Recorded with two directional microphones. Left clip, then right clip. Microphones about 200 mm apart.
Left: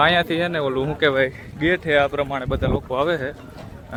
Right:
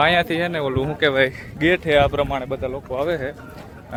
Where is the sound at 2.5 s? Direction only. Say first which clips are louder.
Left 2 dB; 15° left (ahead or behind).